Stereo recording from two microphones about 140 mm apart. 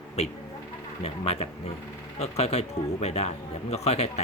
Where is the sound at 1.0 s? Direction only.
45° left (ahead or behind).